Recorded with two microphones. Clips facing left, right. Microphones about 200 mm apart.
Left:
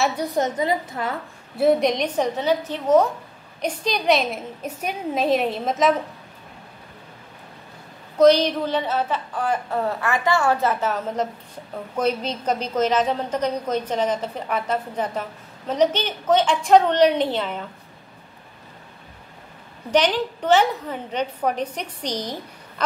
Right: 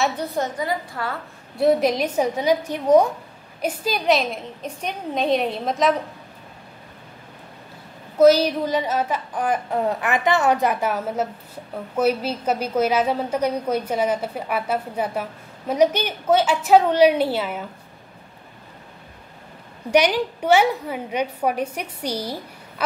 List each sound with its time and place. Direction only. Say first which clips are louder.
0.2 s a woman's voice: left 3 dB; 20° left (ahead or behind)
1.6 s a woman's voice: even; centre (ahead or behind)
8.2 s a woman's voice: right 1 dB; 5° right (ahead or behind)
19.9 s a woman's voice: right 2 dB; 10° right (ahead or behind)